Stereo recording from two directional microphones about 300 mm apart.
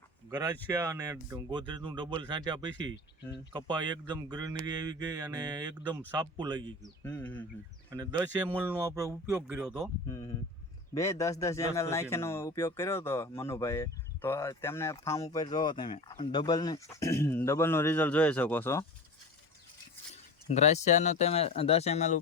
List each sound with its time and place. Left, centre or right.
0.3 s speech: centre
6.8 s speech: centre
7.9 s speech: centre
10.1 s a man's voice: centre
20.5 s speech: left